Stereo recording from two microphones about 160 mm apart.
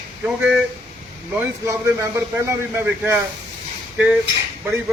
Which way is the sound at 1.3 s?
15° right (ahead or behind).